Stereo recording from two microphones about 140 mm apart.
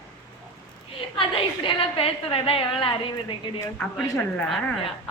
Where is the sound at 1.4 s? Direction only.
40° left (ahead or behind).